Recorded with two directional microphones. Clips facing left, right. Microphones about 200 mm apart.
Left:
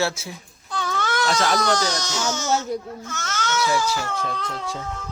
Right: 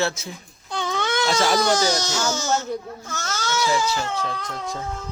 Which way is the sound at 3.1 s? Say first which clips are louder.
Even; 35° right (ahead or behind).